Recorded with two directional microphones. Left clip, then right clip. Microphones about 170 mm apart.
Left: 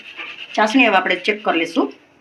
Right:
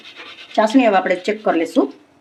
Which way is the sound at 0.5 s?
50° right (ahead or behind).